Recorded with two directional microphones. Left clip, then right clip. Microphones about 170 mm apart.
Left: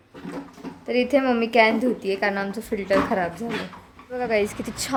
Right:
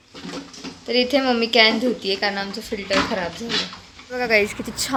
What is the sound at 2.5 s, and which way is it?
Speech, 25° left (ahead or behind).